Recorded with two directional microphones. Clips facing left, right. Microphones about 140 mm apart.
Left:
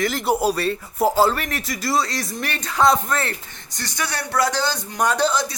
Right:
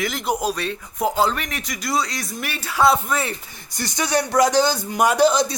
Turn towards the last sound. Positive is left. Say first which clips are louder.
# right 4 dB
turn(degrees=-15)  # may be behind; listen again after turning